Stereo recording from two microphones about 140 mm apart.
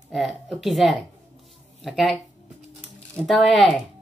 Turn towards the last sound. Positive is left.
turn(degrees=0)  # may be behind; listen again after turning